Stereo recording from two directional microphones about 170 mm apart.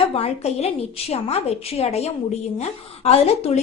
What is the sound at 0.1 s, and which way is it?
A woman's voice, 35° left (ahead or behind).